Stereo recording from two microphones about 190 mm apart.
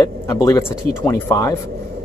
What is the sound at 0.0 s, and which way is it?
A man's voice, 15° left (ahead or behind).